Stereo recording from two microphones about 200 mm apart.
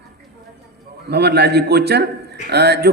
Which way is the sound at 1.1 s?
55° right (ahead or behind).